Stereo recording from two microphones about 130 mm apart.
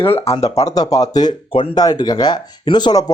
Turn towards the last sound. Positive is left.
turn(degrees=35)  # may be behind; listen again after turning